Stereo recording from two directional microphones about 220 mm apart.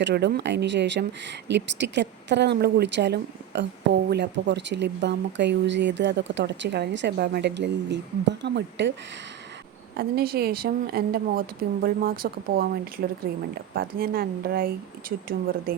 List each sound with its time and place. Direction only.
0.0 s speech: 50° right (ahead or behind)
10.0 s speech: 45° right (ahead or behind)